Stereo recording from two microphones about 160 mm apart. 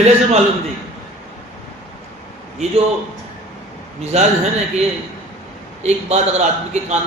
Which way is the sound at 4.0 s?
40° right (ahead or behind).